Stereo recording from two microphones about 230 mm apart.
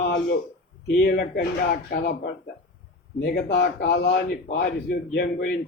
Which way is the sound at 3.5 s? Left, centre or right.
Left.